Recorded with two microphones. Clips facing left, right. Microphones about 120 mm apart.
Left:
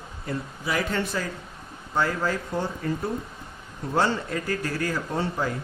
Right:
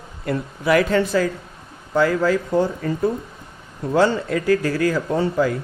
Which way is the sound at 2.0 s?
90° right.